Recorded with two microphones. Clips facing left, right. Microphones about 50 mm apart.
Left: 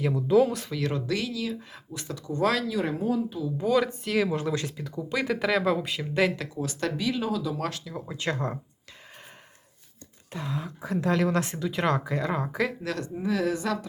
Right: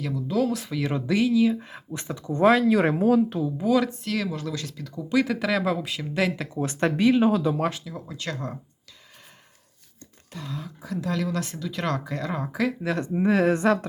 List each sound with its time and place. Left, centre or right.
0.0 s speech: left
0.5 s speech: centre; by 2.6 s right
2.6 s speech: right
3.0 s speech: right
3.6 s speech: centre
4.3 s speech: left
4.9 s speech: centre
6.5 s speech: right
7.5 s speech: centre
8.0 s speech: left
10.3 s speech: left; by 12.7 s centre
13.1 s speech: right